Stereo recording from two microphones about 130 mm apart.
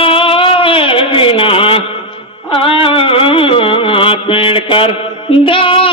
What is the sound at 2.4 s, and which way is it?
Music, 45° left (ahead or behind).